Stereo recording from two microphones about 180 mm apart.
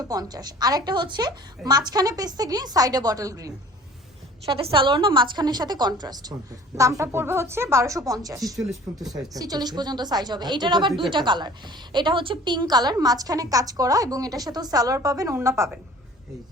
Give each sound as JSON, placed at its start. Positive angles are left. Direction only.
{"t": 0.1, "sound": "a woman's voice", "side_deg": -20}
{"t": 4.5, "sound": "a woman's voice", "side_deg": -30}